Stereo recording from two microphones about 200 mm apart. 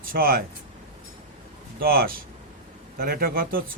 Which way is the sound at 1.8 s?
50° right (ahead or behind).